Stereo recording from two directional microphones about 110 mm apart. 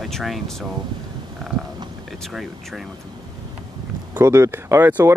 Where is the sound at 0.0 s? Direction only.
Centre (ahead or behind).